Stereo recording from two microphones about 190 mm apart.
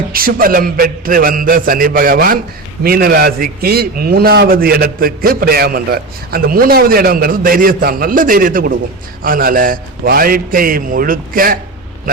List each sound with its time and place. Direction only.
0.1 s a man's voice: 50° right (ahead or behind)